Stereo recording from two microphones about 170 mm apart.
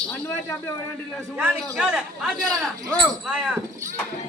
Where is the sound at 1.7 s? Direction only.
5° right (ahead or behind).